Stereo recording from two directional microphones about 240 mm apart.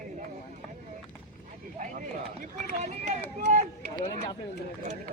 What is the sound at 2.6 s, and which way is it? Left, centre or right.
Run, right.